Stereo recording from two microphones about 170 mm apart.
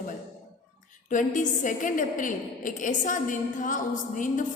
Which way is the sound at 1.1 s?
50° left (ahead or behind).